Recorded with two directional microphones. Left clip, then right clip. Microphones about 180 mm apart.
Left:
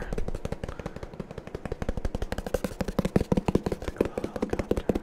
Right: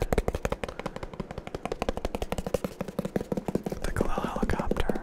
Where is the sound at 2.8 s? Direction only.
60° left (ahead or behind).